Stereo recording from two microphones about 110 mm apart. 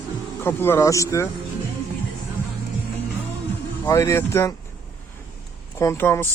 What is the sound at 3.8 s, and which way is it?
Speech, 25° left (ahead or behind).